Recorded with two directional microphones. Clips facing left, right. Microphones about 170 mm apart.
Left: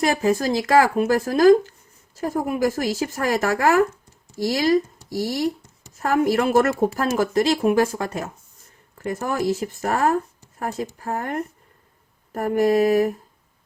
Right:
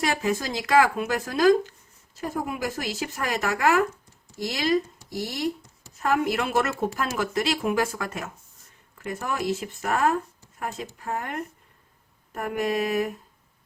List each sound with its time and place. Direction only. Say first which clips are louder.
0.0 s speech: left 6 dB; 40° left (ahead or behind)